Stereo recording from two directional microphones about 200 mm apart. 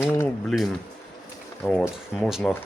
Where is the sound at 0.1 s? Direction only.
5° left (ahead or behind).